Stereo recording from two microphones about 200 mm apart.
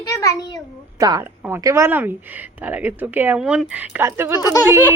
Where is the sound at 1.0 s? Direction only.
20° right (ahead or behind).